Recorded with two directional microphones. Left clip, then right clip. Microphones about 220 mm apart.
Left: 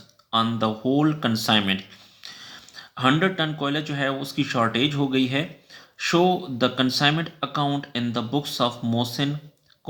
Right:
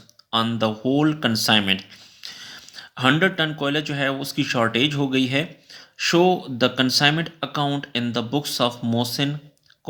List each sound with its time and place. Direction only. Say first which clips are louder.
0.3 s speech: right 1 dB; 25° right (ahead or behind)